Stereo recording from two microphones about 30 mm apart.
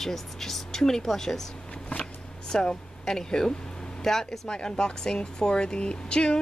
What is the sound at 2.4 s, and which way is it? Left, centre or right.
A woman's voice, centre.